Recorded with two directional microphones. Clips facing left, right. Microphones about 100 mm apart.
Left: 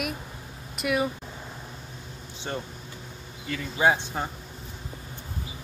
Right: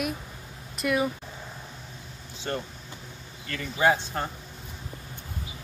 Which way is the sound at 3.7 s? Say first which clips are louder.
Even; 20° left (ahead or behind).